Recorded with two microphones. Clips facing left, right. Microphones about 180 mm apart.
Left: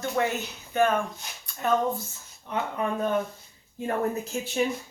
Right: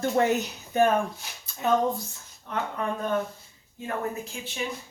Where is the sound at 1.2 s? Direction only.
Centre (ahead or behind).